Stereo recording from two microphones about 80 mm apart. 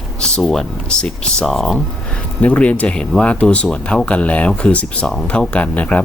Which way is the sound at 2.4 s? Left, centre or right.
Centre.